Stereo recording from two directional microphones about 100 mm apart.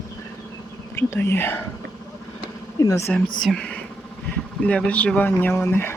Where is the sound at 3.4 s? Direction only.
10° left (ahead or behind).